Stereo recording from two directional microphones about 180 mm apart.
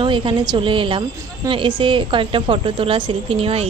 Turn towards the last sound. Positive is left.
turn(degrees=-30)  # may be behind; listen again after turning